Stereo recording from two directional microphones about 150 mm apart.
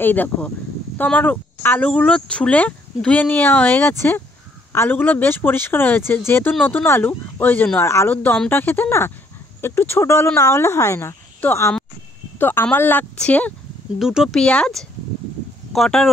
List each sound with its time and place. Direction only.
0.0 s speech: 10° left (ahead or behind)
13.9 s speech: centre (ahead or behind)